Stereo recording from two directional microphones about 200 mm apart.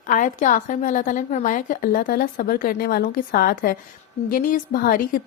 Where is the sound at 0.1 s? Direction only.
40° left (ahead or behind).